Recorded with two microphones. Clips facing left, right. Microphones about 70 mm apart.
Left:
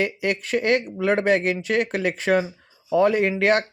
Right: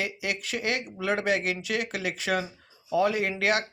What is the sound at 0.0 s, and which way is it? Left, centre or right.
Speech, left.